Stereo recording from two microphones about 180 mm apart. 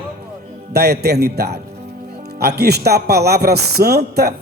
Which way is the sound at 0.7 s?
60° right (ahead or behind).